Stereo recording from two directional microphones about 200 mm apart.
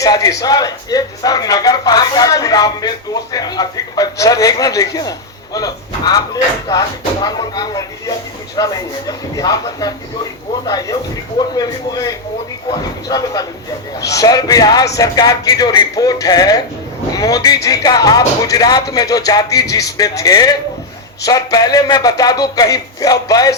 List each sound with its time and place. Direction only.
0.0 s speech: 15° left (ahead or behind)